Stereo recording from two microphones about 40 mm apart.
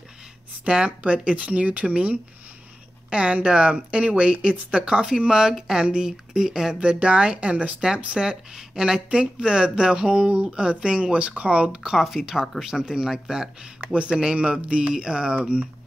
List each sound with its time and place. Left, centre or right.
0.7 s a woman's voice: right
5.5 s speech: centre
6.8 s speech: right
11.1 s speech: right
11.9 s speech: centre; by 15.7 s right